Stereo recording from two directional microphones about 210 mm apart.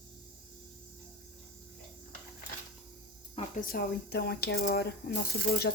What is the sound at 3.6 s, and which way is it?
Speech, 50° left (ahead or behind).